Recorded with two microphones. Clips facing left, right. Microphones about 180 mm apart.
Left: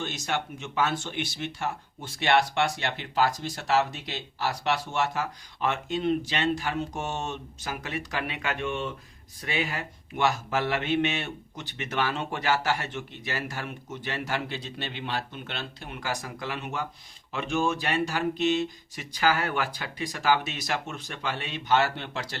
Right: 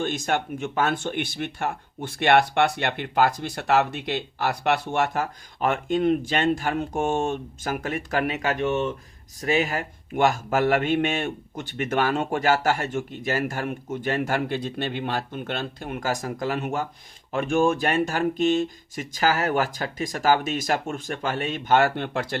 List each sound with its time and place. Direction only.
0.0 s speech: 50° right (ahead or behind)